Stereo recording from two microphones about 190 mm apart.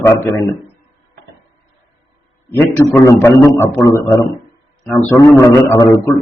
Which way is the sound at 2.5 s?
10° left (ahead or behind).